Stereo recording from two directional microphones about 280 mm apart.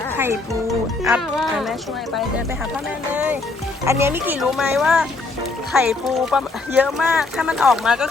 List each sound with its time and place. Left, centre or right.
1.0 s speech: centre
3.1 s speech: centre